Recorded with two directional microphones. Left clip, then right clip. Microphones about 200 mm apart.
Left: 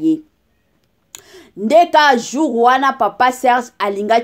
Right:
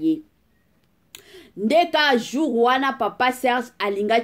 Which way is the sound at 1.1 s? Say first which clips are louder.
Left 4 dB; 25° left (ahead or behind).